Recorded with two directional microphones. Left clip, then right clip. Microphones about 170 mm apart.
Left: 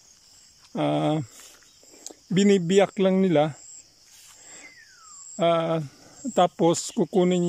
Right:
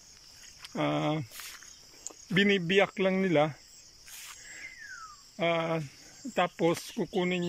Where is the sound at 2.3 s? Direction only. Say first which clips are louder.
Left 5 dB; 30° left (ahead or behind).